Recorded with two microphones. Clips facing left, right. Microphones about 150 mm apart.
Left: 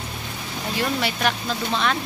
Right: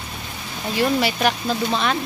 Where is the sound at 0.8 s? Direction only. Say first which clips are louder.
Right 5 dB; 10° right (ahead or behind).